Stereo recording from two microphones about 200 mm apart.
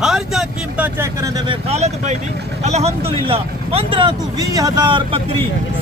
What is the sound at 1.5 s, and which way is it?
Speech, 30° right (ahead or behind).